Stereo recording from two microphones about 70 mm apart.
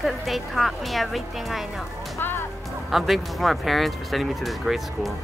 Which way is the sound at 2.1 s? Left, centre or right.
Left.